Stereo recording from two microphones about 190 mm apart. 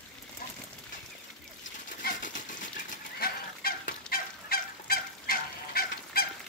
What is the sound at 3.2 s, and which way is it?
Fowl, 50° left (ahead or behind).